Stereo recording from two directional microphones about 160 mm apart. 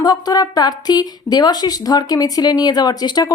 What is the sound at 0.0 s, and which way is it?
A woman's voice, 25° left (ahead or behind).